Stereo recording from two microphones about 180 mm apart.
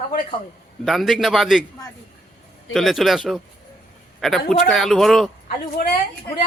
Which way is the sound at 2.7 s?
Centre (ahead or behind).